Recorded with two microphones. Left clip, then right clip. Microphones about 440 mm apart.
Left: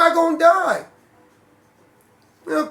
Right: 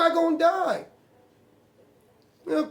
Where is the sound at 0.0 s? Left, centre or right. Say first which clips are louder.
Left 7 dB; right.